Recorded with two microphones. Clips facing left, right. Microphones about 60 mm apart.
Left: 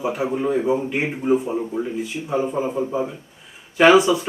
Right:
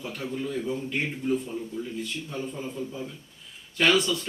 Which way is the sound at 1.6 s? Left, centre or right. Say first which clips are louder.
Left 9 dB; left.